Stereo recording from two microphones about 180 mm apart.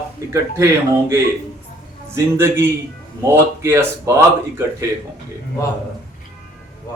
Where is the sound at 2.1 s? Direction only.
15° right (ahead or behind).